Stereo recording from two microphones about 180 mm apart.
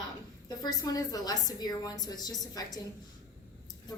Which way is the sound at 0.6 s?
20° left (ahead or behind).